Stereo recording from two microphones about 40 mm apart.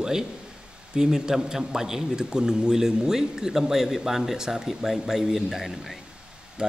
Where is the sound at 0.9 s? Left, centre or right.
Centre.